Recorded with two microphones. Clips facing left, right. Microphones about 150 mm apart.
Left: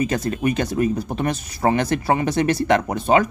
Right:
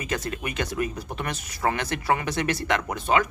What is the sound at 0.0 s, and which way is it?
Speech, 35° left (ahead or behind).